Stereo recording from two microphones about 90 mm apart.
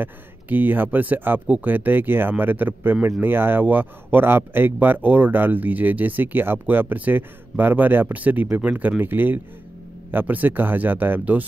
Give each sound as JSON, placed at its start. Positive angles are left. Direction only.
{"t": 0.0, "sound": "speech", "side_deg": -20}